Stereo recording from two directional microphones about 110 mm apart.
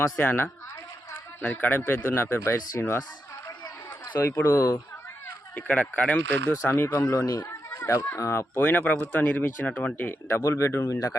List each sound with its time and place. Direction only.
0.0 s speech: 20° left (ahead or behind)
1.4 s speech: 10° left (ahead or behind)
1.7 s speech: 20° left (ahead or behind)
4.2 s speech: 20° left (ahead or behind)
5.5 s speech: 15° left (ahead or behind)
7.1 s speech: 35° left (ahead or behind)